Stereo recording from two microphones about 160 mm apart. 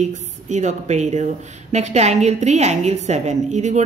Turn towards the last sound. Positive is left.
turn(degrees=-45)  # may be behind; listen again after turning